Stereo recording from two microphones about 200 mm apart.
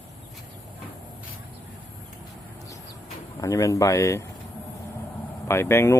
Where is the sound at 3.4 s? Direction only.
15° left (ahead or behind).